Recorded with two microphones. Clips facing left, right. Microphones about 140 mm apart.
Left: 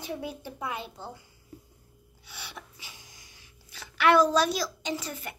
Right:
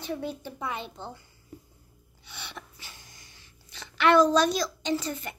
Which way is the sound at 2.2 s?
5° left (ahead or behind).